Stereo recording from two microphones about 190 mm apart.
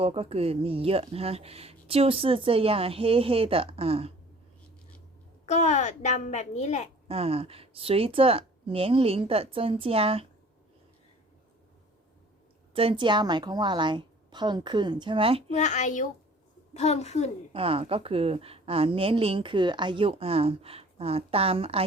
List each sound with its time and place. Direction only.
0.0 s speech: 30° right (ahead or behind)
5.5 s a child's voice: 35° left (ahead or behind)
7.1 s a woman's voice: 30° right (ahead or behind)
12.7 s a woman's voice: 30° right (ahead or behind)
15.5 s a child's voice: 40° left (ahead or behind)
17.5 s a woman's voice: 30° right (ahead or behind)